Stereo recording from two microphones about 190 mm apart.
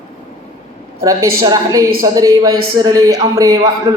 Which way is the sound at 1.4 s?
20° right (ahead or behind).